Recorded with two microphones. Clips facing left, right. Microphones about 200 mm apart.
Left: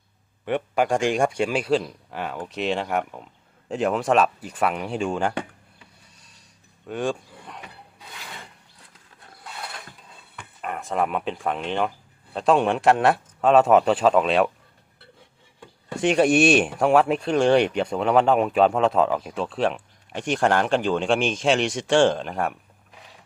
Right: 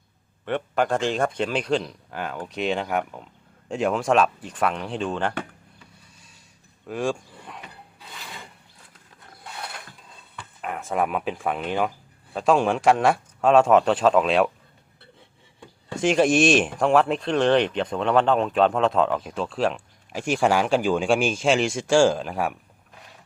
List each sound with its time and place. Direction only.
0.4 s speech: 10° left (ahead or behind)
6.8 s a sound: centre (ahead or behind)
10.6 s speech: centre (ahead or behind)
15.9 s speech: centre (ahead or behind)